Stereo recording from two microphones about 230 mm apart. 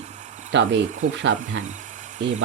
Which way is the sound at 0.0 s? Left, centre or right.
Right.